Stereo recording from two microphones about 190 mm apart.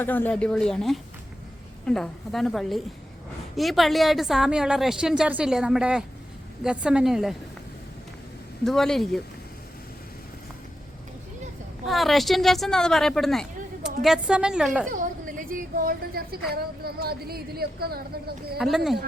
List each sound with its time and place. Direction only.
0.0 s speech: 10° left (ahead or behind)
8.6 s speech: centre (ahead or behind)
11.9 s speech: centre (ahead or behind)
14.8 s a woman's voice: 45° right (ahead or behind)
18.5 s speech: centre (ahead or behind)